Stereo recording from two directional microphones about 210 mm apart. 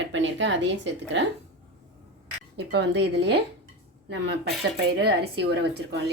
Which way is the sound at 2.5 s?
55° right (ahead or behind).